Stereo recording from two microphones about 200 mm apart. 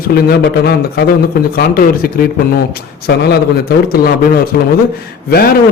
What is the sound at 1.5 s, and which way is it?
Speech, 50° left (ahead or behind).